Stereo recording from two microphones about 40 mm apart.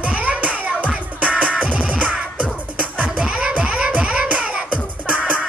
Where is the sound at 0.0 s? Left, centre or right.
Right.